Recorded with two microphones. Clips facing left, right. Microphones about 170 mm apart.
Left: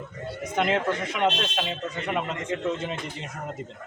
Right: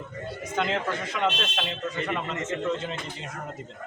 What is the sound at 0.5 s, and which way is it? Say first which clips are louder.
Speech: left 3 dB; 20° left (ahead or behind).